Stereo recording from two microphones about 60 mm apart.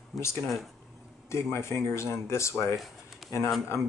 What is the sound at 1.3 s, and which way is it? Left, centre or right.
Speech, left.